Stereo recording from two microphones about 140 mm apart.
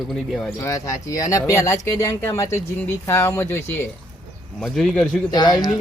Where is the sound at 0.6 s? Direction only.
20° left (ahead or behind).